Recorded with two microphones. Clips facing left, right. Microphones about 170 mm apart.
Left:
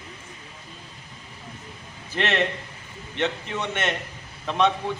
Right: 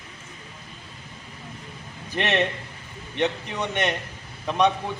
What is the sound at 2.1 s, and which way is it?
A man's voice, 15° right (ahead or behind).